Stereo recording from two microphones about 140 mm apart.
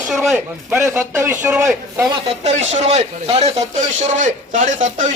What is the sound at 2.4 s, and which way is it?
Speech, 55° right (ahead or behind).